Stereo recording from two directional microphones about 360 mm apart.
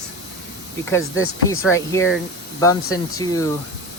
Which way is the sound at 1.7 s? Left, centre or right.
Centre.